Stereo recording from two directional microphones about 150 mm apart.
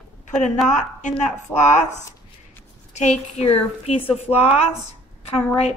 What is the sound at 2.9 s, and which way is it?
A woman's voice, 50° left (ahead or behind).